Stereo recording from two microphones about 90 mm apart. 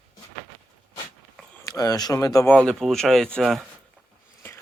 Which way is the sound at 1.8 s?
45° left (ahead or behind).